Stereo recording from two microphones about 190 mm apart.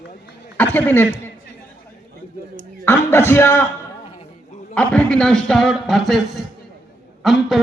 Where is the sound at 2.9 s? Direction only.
10° left (ahead or behind).